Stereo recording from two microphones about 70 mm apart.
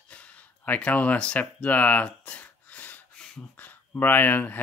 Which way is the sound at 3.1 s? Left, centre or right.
Centre.